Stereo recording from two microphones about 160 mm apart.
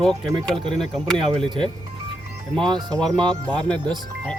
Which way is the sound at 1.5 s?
30° right (ahead or behind).